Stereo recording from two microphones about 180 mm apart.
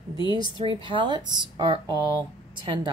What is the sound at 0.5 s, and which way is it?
Speech, 30° right (ahead or behind).